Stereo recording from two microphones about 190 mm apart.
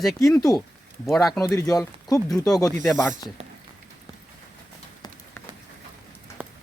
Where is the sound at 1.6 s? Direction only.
20° left (ahead or behind).